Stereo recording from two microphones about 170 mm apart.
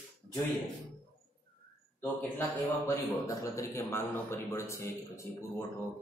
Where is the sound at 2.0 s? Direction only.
15° left (ahead or behind).